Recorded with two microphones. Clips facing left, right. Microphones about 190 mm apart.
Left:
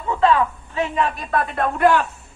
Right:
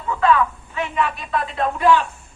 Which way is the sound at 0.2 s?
30° left (ahead or behind).